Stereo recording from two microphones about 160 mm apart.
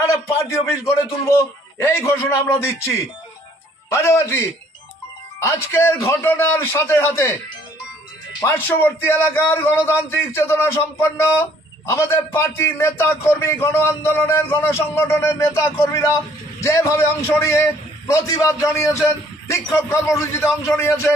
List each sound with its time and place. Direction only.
0.0 s a sound: 20° left (ahead or behind)
1.3 s a man's voice: 15° left (ahead or behind)
8.5 s a man's voice: 10° left (ahead or behind)